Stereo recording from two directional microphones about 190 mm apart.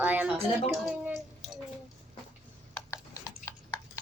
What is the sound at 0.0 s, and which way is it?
Music, 5° right (ahead or behind).